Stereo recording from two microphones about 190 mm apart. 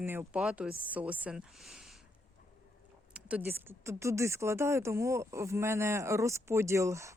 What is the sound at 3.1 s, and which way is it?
Speech, 10° right (ahead or behind).